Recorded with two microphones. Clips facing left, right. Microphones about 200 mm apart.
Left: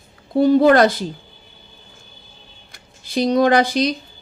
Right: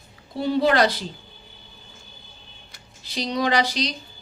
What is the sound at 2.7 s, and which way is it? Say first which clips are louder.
Speech: left 10 dB; 50° left (ahead or behind).